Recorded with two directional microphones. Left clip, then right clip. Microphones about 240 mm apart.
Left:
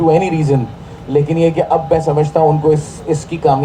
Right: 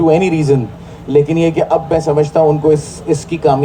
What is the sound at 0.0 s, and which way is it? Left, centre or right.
Speech, right.